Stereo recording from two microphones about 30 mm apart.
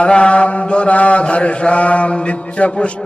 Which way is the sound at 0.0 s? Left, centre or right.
Left.